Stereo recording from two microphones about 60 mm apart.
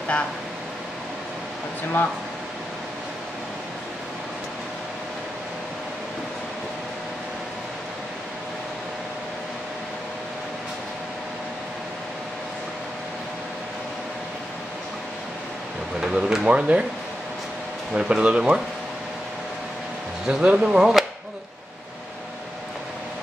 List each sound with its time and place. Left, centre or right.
16.0 s speech: centre
17.9 s speech: centre
20.2 s speech: centre